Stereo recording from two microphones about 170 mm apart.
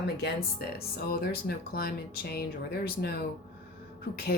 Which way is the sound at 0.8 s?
65° left (ahead or behind).